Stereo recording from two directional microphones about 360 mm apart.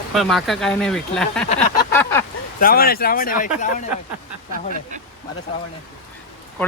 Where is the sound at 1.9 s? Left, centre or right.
Centre.